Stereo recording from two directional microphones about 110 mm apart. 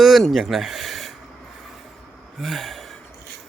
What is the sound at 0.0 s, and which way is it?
Speech, centre (ahead or behind).